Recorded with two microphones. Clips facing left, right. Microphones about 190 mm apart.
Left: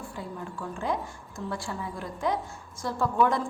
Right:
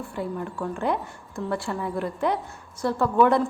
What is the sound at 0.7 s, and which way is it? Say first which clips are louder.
A woman's voice: right 3 dB; 60° right (ahead or behind).